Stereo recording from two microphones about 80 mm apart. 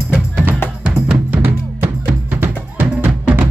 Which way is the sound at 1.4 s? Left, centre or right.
Right.